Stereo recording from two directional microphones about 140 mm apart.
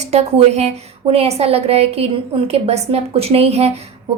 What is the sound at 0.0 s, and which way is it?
A woman's voice, 50° right (ahead or behind).